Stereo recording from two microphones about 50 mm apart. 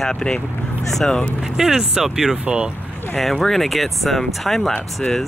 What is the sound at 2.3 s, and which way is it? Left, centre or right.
Speech, right.